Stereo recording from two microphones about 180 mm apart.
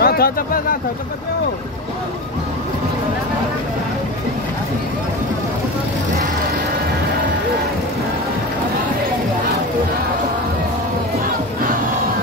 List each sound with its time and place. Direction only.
0.0 s speech: 60° left (ahead or behind)